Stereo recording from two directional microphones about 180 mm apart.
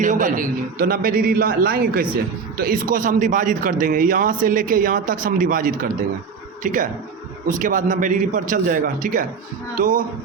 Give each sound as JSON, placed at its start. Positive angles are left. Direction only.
{"t": 0.0, "sound": "speech", "side_deg": -45}